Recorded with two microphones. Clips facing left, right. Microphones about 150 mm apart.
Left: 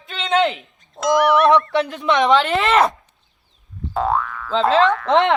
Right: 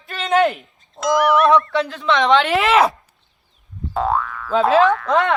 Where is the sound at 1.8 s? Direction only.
20° left (ahead or behind).